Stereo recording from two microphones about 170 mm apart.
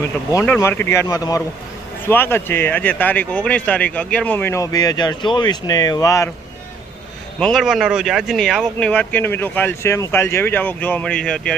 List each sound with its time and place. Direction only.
0.4 s a man's voice: 10° left (ahead or behind)
7.3 s speech: centre (ahead or behind)